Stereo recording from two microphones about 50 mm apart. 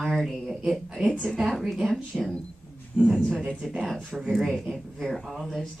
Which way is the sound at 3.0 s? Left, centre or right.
Right.